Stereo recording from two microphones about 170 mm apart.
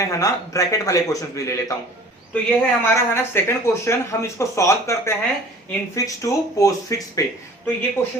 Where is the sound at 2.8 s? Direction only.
15° left (ahead or behind).